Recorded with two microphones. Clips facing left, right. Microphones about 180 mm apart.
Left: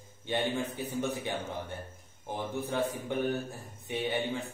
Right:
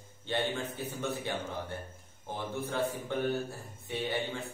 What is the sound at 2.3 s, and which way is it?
A man's voice, 15° left (ahead or behind).